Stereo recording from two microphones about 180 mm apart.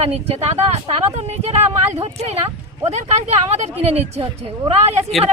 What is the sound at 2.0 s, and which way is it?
Speech, 35° right (ahead or behind).